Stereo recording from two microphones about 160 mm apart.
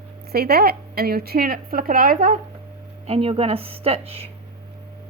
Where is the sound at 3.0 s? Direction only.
40° right (ahead or behind).